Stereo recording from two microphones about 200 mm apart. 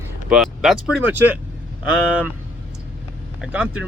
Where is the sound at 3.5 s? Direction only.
5° right (ahead or behind).